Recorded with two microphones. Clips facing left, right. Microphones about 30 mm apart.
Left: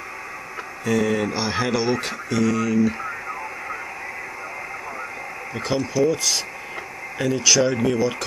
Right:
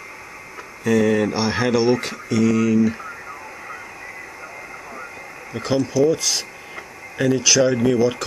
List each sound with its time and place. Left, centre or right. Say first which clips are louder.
0.8 s speech: right 4 dB; centre
5.5 s speech: right 3 dB; centre